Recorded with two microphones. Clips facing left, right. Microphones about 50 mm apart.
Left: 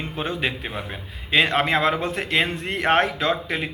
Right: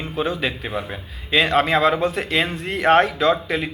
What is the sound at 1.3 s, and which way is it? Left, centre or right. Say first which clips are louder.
Speech: right 2 dB; left.